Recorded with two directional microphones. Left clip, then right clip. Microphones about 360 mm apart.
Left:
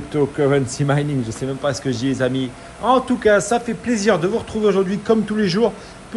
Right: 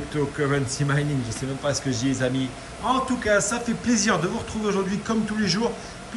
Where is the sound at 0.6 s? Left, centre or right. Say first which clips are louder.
Left 5 dB; centre.